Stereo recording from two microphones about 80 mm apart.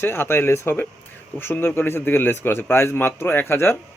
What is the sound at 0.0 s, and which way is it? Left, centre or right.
A man's voice, left.